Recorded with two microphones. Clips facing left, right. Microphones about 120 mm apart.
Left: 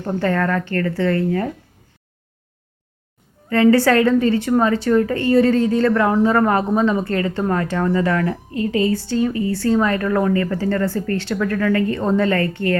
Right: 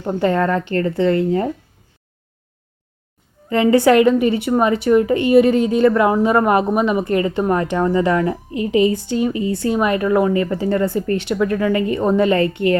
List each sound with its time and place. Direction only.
0.0 s speech: 15° right (ahead or behind)
3.5 s a woman's voice: 15° right (ahead or behind)